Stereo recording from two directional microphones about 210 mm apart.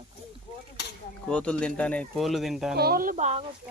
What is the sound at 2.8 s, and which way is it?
Speech, 45° right (ahead or behind).